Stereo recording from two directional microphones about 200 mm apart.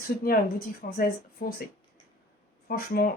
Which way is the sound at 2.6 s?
50° left (ahead or behind).